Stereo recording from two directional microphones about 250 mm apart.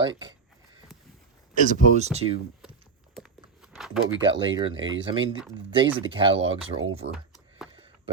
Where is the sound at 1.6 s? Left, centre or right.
Right.